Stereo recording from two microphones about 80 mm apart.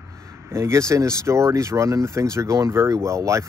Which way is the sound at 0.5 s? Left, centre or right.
Right.